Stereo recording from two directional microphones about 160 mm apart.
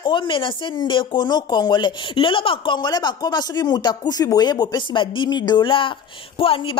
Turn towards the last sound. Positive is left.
turn(degrees=35)  # may be behind; listen again after turning